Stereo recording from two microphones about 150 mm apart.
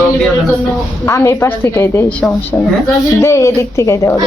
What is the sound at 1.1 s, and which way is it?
Speech, 20° left (ahead or behind).